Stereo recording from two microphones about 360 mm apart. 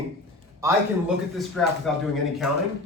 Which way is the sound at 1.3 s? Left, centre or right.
Centre.